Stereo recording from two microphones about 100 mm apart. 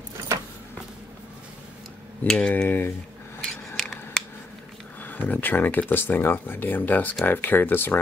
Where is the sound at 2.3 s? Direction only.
10° left (ahead or behind).